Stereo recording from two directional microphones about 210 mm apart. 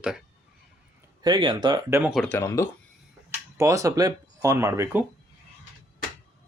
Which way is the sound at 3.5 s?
15° right (ahead or behind).